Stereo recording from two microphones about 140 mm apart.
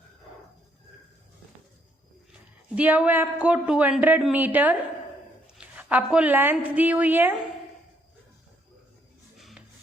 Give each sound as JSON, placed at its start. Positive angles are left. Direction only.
{"t": 2.7, "sound": "a man's voice", "side_deg": -10}
{"t": 9.4, "sound": "music", "side_deg": 0}